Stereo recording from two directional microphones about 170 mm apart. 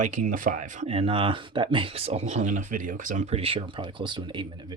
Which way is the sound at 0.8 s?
35° right (ahead or behind).